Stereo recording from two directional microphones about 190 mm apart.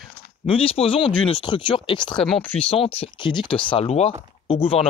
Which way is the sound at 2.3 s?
10° left (ahead or behind).